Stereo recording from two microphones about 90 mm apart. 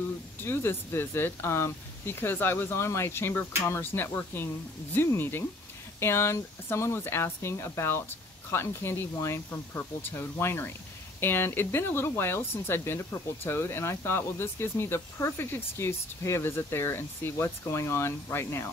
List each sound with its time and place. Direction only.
0.4 s speech: 25° left (ahead or behind)